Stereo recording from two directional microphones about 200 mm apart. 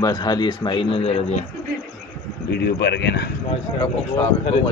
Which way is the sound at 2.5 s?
55° left (ahead or behind).